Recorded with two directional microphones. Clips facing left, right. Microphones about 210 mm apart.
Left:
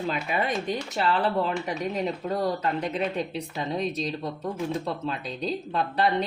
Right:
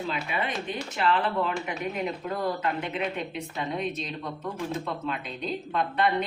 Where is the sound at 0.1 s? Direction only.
40° left (ahead or behind).